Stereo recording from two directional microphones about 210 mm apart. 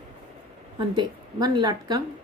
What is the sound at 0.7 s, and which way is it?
Speech, 20° right (ahead or behind).